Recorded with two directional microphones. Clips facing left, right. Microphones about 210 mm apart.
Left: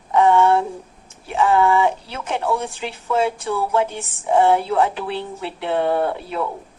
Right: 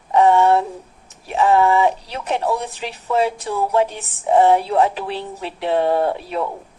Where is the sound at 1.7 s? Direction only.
15° right (ahead or behind).